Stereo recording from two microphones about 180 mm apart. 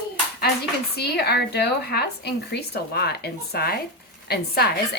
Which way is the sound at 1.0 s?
65° left (ahead or behind).